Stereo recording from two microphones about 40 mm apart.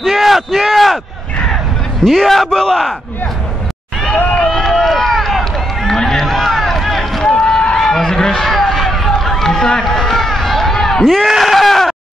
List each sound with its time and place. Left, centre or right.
0.1 s speech: centre
2.0 s speech: centre
4.4 s run: centre
7.2 s run: left
11.2 s a sound: centre